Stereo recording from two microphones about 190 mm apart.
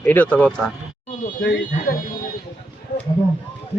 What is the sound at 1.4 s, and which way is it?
Speech, 50° left (ahead or behind).